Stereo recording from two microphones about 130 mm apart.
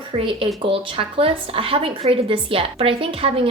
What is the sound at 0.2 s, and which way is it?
A woman's voice, 45° right (ahead or behind).